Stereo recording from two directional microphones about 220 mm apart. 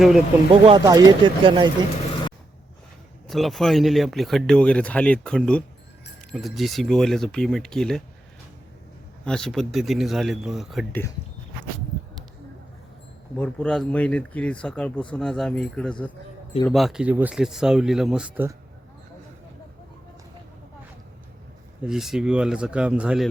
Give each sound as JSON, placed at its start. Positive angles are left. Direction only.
{"t": 0.6, "sound": "speech", "side_deg": -20}
{"t": 3.2, "sound": "speech", "side_deg": 0}
{"t": 9.2, "sound": "speech", "side_deg": 5}
{"t": 13.3, "sound": "speech", "side_deg": 5}
{"t": 21.8, "sound": "speech", "side_deg": 0}